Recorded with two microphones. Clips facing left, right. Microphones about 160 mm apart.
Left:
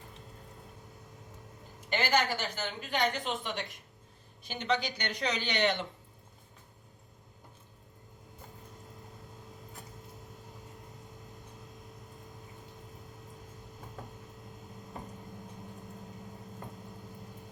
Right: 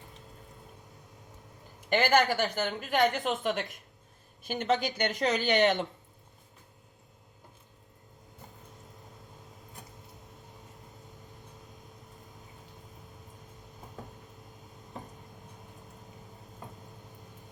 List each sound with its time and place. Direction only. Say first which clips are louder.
1.9 s a woman's voice: right 5 dB; 50° right (ahead or behind)